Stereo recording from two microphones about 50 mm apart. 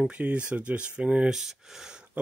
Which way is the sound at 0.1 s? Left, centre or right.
Right.